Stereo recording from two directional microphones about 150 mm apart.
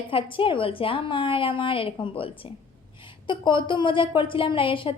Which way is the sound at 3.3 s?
30° left (ahead or behind).